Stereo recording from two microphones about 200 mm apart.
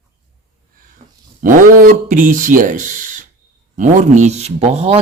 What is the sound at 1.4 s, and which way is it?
Speech, 45° right (ahead or behind).